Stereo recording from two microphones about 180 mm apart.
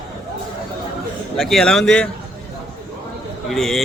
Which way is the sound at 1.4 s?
Centre (ahead or behind).